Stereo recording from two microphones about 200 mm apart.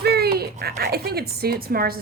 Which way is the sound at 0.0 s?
50° right (ahead or behind).